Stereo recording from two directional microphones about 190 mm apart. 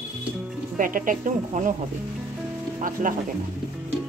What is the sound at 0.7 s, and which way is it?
Speech, 45° right (ahead or behind).